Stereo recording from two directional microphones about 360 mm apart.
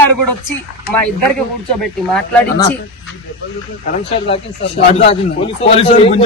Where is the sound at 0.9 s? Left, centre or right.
Centre.